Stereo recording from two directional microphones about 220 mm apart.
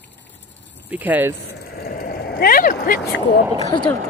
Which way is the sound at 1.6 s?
45° left (ahead or behind).